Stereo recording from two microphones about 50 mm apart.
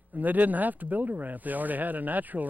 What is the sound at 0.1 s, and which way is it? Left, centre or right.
Speech, right.